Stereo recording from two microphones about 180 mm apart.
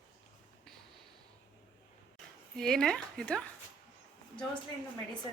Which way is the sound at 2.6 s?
5° left (ahead or behind).